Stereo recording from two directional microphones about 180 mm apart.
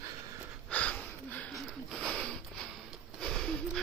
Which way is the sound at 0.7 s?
5° left (ahead or behind).